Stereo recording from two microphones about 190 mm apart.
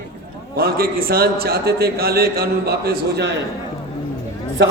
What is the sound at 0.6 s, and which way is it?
A man's voice, 55° right (ahead or behind).